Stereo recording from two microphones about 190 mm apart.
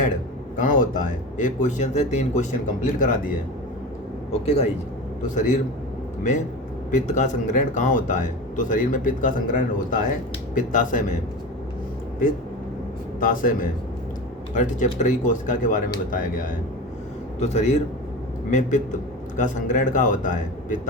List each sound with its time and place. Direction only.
0.5 s a man's voice: 45° left (ahead or behind)
4.3 s speech: 35° left (ahead or behind)
6.9 s a man's voice: 40° left (ahead or behind)
13.1 s a man's voice: 45° left (ahead or behind)
17.4 s speech: 35° left (ahead or behind)
19.4 s a man's voice: 40° left (ahead or behind)